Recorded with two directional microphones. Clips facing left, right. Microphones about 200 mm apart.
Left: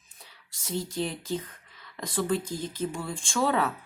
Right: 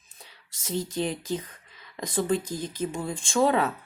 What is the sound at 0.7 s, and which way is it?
Speech, 20° right (ahead or behind).